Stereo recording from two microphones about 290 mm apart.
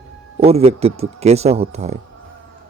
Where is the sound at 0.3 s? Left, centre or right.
Right.